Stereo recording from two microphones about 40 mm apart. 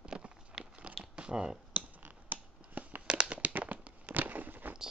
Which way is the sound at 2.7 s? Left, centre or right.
Right.